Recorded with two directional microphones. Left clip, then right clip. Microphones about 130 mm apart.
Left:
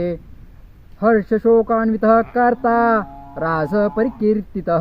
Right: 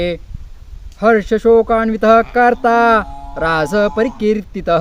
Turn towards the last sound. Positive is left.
turn(degrees=-20)  # may be behind; listen again after turning